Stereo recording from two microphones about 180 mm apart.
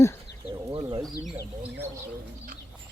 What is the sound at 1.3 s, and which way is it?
Bird, 10° right (ahead or behind).